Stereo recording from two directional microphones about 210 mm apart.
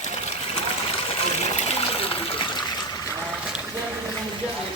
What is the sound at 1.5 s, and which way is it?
Water, 30° left (ahead or behind).